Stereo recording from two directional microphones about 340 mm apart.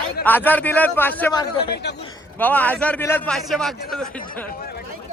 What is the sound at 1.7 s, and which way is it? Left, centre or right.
Speech, left.